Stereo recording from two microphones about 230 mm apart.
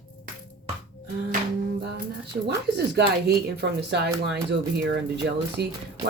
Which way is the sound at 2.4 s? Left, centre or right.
Right.